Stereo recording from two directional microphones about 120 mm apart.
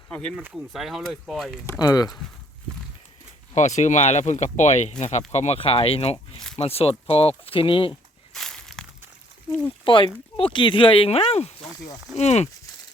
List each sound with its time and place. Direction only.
0.1 s speech: 5° left (ahead or behind)
1.8 s speech: 30° left (ahead or behind)
3.5 s speech: 85° left
5.3 s speech: 65° left (ahead or behind); by 7.9 s 45° left (ahead or behind)
8.3 s a sound: 5° left (ahead or behind)
9.8 s speech: 45° left (ahead or behind); by 12.5 s 65° left (ahead or behind)